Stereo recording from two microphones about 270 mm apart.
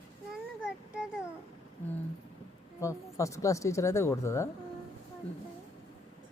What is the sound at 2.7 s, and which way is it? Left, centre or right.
Speech, centre.